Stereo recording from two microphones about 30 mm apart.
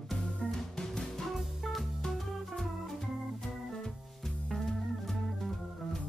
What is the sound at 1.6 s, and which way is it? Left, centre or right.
Music, centre.